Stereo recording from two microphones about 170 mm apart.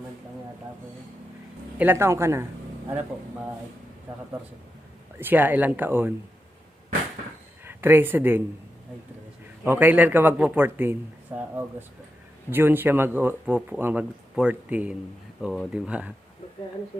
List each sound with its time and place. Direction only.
1.8 s speech: 15° right (ahead or behind)
5.2 s speech: 10° right (ahead or behind)
7.6 s speech: 15° right (ahead or behind)
9.6 s speech: 10° right (ahead or behind)